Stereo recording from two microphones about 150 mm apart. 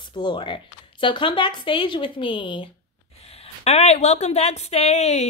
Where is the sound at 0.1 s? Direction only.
30° left (ahead or behind).